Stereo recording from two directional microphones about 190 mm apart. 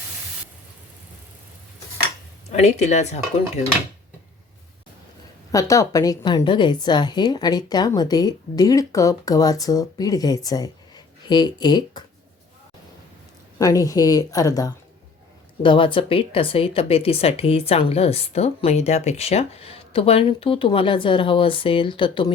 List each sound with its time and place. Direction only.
2.5 s speech: 35° left (ahead or behind)
5.5 s speech: 15° left (ahead or behind)
13.6 s a woman's voice: 20° left (ahead or behind)